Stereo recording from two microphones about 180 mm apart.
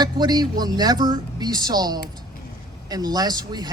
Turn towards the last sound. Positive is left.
turn(degrees=-20)  # may be behind; listen again after turning